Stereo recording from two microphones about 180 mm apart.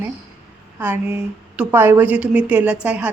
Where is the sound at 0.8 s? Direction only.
10° right (ahead or behind).